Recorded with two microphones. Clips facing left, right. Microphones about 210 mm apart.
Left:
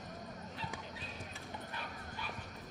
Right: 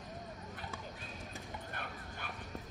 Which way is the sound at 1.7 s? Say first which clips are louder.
Even; 55° right (ahead or behind).